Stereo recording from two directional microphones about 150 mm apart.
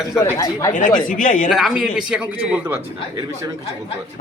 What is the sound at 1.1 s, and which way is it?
Speech, 60° left (ahead or behind).